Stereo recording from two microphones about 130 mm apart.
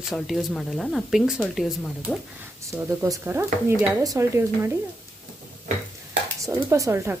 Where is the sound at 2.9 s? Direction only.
20° right (ahead or behind).